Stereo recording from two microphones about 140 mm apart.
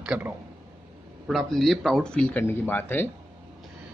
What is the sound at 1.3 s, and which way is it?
Speech, centre (ahead or behind).